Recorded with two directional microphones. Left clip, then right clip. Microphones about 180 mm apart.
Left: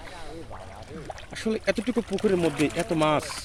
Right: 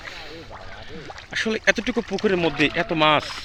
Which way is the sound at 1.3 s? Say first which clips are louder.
Right 7 dB; centre (ahead or behind).